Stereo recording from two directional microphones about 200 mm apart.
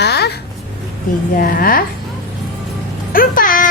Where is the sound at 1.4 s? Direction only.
45° left (ahead or behind).